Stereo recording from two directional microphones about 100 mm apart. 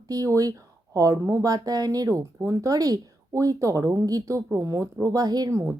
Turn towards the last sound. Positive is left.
turn(degrees=-40)  # may be behind; listen again after turning